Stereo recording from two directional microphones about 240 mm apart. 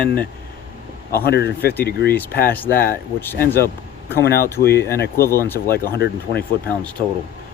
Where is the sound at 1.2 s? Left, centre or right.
Left.